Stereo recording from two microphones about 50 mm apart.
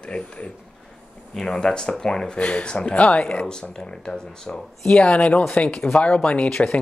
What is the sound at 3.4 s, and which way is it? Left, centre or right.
Speech, centre.